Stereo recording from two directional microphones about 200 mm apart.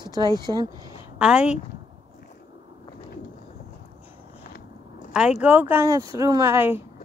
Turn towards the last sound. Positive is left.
turn(degrees=-10)  # may be behind; listen again after turning